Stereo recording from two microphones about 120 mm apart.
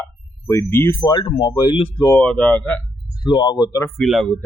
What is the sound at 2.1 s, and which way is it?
Speech, 10° left (ahead or behind).